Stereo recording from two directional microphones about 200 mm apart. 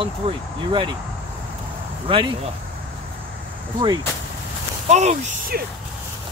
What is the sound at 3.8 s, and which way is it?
Speech, 25° right (ahead or behind).